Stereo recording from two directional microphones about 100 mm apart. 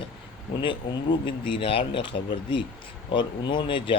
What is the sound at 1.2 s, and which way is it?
Speech, 55° left (ahead or behind).